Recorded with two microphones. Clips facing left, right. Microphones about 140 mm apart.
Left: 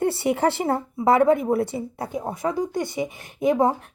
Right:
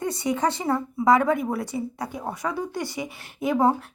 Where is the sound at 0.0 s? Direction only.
65° left (ahead or behind).